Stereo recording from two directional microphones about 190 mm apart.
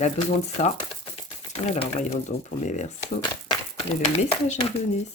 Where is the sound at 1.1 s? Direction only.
35° left (ahead or behind).